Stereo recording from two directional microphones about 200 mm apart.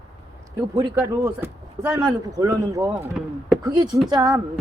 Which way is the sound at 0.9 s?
15° right (ahead or behind).